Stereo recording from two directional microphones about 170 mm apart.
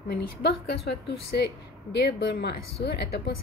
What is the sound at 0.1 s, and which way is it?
Speech, 75° left (ahead or behind).